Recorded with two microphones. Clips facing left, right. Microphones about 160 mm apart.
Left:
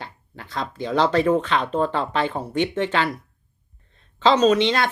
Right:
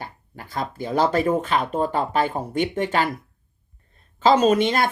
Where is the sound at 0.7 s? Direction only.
10° right (ahead or behind).